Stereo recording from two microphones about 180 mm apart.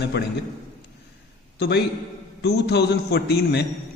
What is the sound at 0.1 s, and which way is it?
Speech, 70° left (ahead or behind).